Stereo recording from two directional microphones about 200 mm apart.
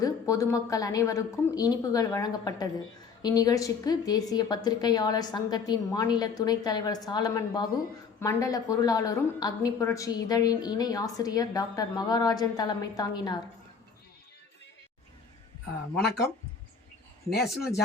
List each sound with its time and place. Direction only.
0.0 s a woman's voice: 15° left (ahead or behind)
17.2 s speech: centre (ahead or behind)